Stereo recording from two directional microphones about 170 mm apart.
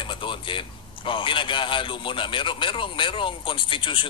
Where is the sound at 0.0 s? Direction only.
30° left (ahead or behind).